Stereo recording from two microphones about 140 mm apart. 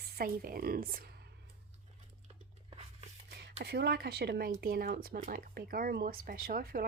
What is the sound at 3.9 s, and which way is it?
Speech, 90° right.